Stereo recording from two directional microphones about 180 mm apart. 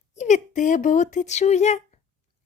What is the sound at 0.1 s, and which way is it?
A woman's voice, 40° left (ahead or behind).